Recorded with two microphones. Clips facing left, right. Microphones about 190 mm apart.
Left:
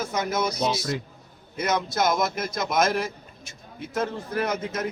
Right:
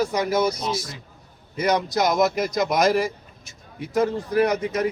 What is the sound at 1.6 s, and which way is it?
A man's voice, 10° right (ahead or behind).